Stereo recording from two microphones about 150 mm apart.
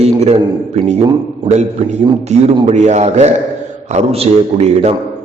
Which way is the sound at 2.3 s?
50° right (ahead or behind).